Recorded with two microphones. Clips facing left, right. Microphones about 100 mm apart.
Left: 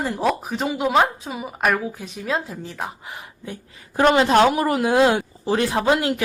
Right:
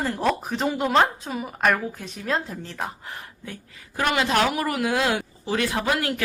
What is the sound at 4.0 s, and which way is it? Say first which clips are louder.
Speech: left 7 dB; 30° left (ahead or behind).